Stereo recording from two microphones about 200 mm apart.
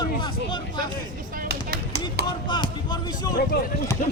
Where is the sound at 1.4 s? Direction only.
50° right (ahead or behind).